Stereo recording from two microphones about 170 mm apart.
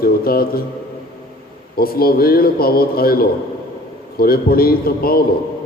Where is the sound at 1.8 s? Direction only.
60° left (ahead or behind).